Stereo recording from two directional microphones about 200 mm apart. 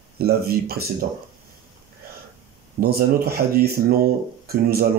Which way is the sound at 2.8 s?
50° right (ahead or behind).